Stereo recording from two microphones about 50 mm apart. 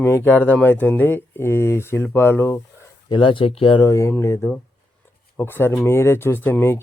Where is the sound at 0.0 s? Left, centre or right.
Left.